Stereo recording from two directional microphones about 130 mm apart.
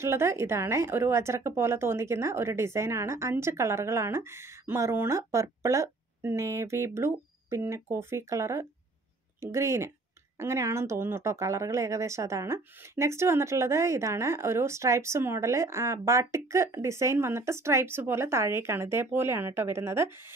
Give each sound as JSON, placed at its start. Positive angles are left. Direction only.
{"t": 0.0, "sound": "speech", "side_deg": -20}